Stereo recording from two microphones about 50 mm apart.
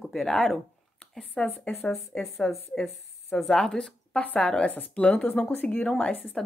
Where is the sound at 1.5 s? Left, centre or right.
Left.